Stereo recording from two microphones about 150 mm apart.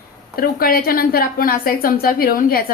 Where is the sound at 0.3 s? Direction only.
80° left.